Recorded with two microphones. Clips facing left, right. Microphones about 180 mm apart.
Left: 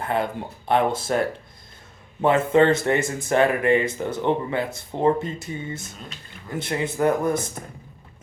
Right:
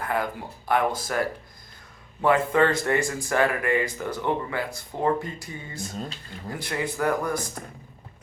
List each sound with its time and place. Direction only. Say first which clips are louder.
0.0 s speech: left 3 dB; 25° left (ahead or behind)